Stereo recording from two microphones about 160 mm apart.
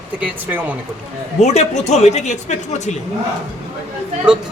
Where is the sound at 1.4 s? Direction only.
45° left (ahead or behind).